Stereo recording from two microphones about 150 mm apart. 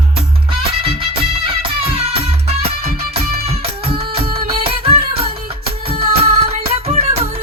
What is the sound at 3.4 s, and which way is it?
Music, 40° right (ahead or behind).